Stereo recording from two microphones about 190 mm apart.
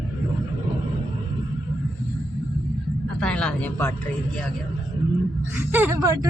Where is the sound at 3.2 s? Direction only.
5° left (ahead or behind).